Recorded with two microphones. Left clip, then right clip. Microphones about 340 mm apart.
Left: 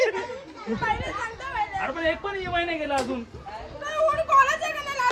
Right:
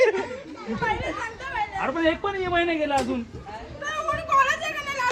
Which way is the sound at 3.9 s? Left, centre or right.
Centre.